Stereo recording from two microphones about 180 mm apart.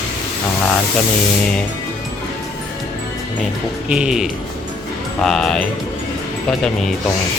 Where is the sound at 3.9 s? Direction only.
5° right (ahead or behind).